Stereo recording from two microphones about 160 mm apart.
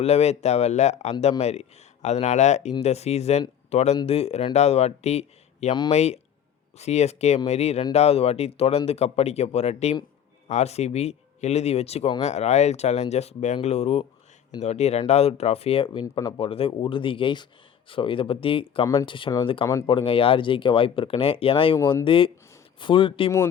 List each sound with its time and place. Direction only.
0.0 s speech: 40° left (ahead or behind)
16.0 s speech: 20° left (ahead or behind)
16.4 s speech: 35° left (ahead or behind)